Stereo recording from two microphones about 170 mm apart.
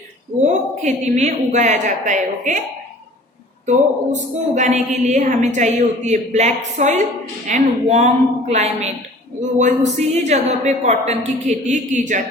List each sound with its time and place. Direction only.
0.4 s a woman's voice: 45° right (ahead or behind)
3.7 s a woman's voice: 45° right (ahead or behind)